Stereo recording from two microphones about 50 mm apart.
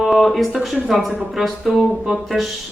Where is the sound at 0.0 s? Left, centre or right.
Centre.